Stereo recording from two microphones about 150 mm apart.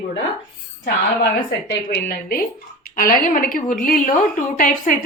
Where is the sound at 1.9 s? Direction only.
90° left.